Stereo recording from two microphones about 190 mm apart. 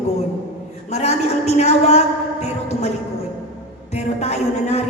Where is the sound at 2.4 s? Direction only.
35° left (ahead or behind).